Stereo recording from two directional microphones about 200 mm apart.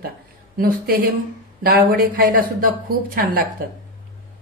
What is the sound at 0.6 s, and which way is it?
A woman's voice, 50° right (ahead or behind).